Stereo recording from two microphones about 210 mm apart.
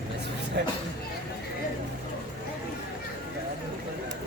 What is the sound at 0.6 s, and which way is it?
Speech, 50° right (ahead or behind).